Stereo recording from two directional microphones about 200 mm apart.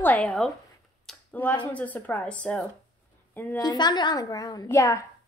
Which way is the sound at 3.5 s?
20° left (ahead or behind).